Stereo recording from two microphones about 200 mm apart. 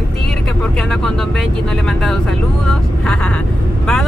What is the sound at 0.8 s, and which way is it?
Speech, 5° left (ahead or behind).